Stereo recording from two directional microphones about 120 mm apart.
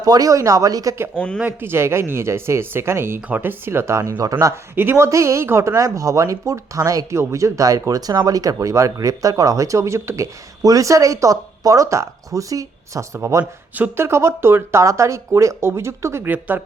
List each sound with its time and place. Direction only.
0.0 s speech: 30° right (ahead or behind)
1.1 s speech: 10° left (ahead or behind)
1.4 s speech: 20° right (ahead or behind)
4.7 s speech: 20° right (ahead or behind)